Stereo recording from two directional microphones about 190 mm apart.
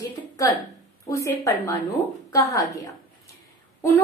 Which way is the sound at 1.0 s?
15° left (ahead or behind).